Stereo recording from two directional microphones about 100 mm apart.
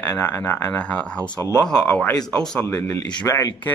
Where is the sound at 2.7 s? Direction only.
25° left (ahead or behind).